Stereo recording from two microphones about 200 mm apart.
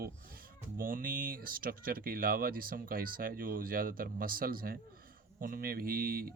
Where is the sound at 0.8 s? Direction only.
45° right (ahead or behind).